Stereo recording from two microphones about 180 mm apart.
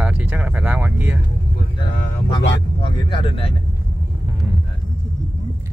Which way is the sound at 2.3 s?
25° left (ahead or behind).